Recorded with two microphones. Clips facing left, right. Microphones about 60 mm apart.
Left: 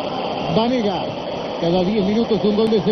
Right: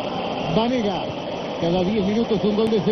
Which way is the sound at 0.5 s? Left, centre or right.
Centre.